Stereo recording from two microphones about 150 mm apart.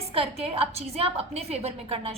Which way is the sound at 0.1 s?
40° right (ahead or behind).